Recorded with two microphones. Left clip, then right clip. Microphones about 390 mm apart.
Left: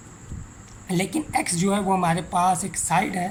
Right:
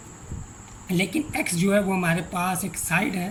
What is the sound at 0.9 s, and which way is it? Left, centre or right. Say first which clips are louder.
Speech: even; centre.